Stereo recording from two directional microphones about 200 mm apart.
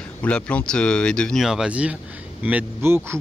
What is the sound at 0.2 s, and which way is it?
Speech, 5° left (ahead or behind).